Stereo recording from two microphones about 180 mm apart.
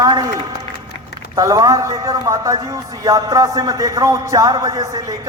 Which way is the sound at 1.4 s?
20° right (ahead or behind).